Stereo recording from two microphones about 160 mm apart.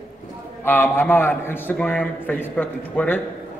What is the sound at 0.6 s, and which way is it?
A man's voice, 15° left (ahead or behind).